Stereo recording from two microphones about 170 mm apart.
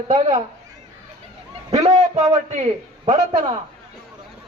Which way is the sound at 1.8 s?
40° right (ahead or behind).